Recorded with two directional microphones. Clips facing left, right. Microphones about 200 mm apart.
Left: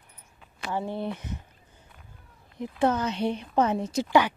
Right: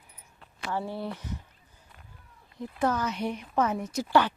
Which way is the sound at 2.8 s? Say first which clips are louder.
Left 3 dB; 25° left (ahead or behind).